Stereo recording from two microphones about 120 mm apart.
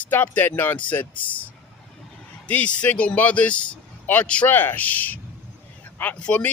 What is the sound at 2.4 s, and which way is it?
A man's voice, 10° left (ahead or behind).